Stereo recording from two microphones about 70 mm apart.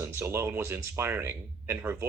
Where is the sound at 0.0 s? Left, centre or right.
Right.